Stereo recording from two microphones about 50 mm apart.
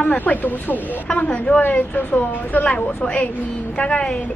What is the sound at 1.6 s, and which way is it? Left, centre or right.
Speech, left.